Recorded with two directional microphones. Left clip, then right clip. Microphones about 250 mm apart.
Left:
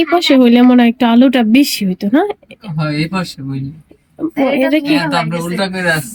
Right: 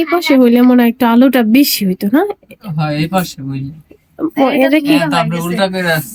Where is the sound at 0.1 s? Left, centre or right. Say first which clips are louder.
Right 1 dB; centre.